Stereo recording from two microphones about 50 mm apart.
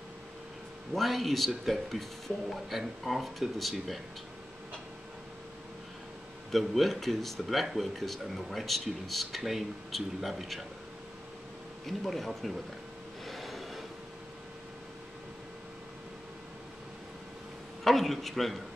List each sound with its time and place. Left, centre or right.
0.9 s speech: centre
6.7 s speech: centre
11.8 s speech: centre
13.2 s train: centre
17.8 s speech: centre